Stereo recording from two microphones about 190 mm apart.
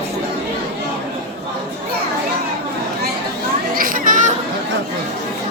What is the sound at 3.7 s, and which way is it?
Chatter, 45° right (ahead or behind).